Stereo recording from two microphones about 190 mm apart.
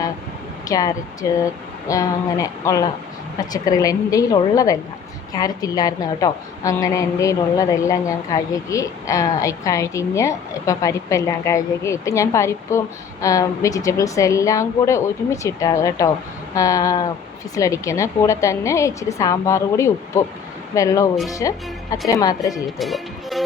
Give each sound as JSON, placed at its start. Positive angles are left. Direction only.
{"t": 0.7, "sound": "a woman's voice", "side_deg": 20}
{"t": 22.5, "sound": "speech", "side_deg": 0}